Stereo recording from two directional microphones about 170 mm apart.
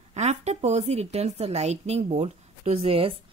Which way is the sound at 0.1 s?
40° right (ahead or behind).